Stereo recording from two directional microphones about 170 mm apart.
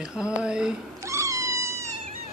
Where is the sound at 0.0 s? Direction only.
5° right (ahead or behind).